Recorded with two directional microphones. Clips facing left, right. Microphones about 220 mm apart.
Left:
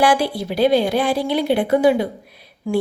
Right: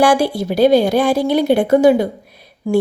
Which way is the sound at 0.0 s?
45° right (ahead or behind).